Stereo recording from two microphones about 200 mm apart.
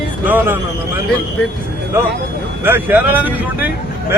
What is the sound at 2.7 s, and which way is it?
Speech, 10° right (ahead or behind).